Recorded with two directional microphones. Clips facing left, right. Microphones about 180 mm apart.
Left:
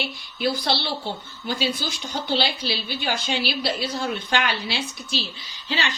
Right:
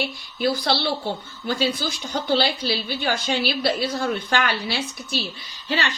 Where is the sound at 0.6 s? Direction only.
55° right (ahead or behind).